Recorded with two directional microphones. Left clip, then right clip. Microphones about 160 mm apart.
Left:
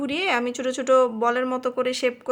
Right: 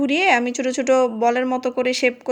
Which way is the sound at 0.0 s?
20° right (ahead or behind).